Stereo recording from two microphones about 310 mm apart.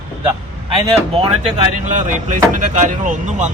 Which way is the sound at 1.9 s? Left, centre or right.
Right.